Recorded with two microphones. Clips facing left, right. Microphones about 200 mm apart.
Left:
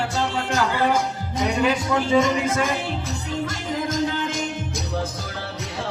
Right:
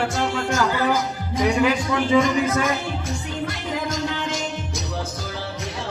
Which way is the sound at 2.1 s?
30° left (ahead or behind).